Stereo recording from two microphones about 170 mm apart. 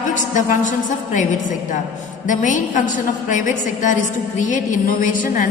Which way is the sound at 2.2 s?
45° left (ahead or behind).